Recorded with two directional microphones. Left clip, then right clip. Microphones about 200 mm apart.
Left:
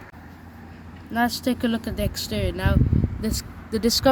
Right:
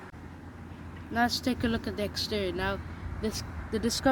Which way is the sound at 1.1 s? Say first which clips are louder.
Left 4 dB; 40° left (ahead or behind).